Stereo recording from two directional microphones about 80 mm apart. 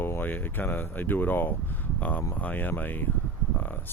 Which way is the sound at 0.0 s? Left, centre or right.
Left.